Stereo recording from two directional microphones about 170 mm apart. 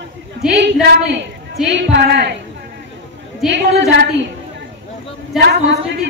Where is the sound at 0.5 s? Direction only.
90° right.